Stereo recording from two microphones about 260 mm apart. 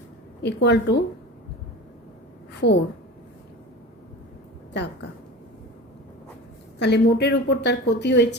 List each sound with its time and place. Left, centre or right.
0.4 s speech: left
2.5 s a sound: left
4.7 s speech: left
6.7 s speech: left